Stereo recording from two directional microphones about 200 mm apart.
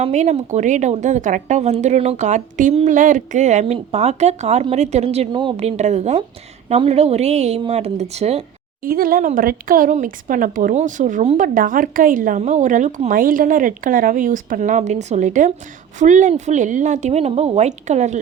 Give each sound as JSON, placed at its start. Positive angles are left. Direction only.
{"t": 0.0, "sound": "speech", "side_deg": -35}
{"t": 8.8, "sound": "speech", "side_deg": -45}